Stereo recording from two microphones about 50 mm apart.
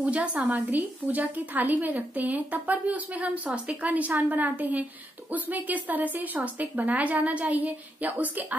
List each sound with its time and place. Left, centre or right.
0.0 s a woman's voice: right